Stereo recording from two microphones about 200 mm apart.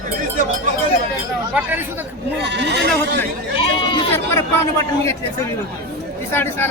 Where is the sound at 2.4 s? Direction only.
60° right (ahead or behind).